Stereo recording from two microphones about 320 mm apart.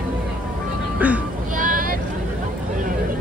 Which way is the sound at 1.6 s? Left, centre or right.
Right.